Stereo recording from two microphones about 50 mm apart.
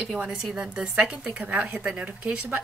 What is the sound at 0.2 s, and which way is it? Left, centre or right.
A woman's voice, centre.